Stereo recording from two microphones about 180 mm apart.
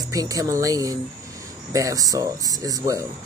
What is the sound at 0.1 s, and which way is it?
Speech, 20° right (ahead or behind).